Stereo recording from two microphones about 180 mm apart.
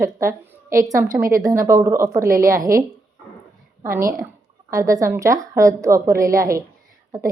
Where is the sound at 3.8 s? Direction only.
15° right (ahead or behind).